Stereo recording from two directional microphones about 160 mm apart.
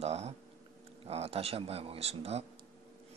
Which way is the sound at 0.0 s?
40° right (ahead or behind).